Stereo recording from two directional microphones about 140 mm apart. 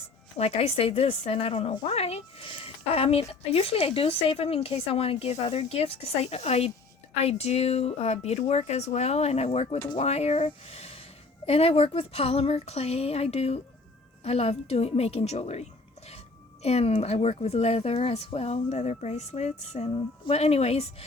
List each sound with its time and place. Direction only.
0.3 s a woman's voice: 50° left (ahead or behind)